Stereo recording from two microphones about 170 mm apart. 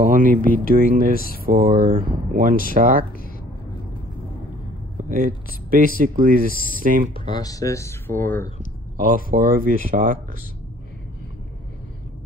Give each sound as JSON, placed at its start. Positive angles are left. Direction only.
{"t": 0.0, "sound": "speech", "side_deg": -55}
{"t": 5.1, "sound": "speech", "side_deg": -55}
{"t": 7.2, "sound": "speech", "side_deg": 25}
{"t": 9.0, "sound": "speech", "side_deg": -55}